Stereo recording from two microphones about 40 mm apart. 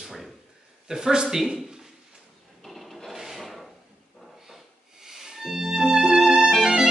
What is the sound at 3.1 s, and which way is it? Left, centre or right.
Filing, centre.